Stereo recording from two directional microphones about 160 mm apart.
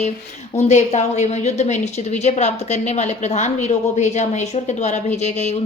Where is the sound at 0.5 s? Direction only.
45° left (ahead or behind).